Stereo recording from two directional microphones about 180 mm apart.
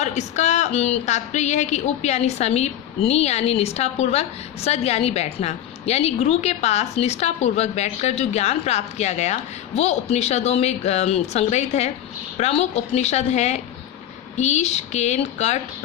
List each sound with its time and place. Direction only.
0.0 s a woman's voice: 40° left (ahead or behind)